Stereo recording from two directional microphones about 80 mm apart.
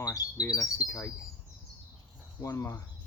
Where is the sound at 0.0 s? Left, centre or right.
Left.